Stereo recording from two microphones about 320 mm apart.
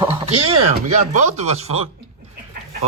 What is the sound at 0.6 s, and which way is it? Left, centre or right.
Speech, right.